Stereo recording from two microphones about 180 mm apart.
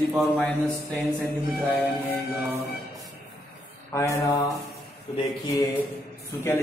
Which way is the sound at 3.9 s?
15° left (ahead or behind).